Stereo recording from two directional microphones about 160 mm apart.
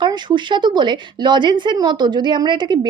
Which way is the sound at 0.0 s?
30° right (ahead or behind).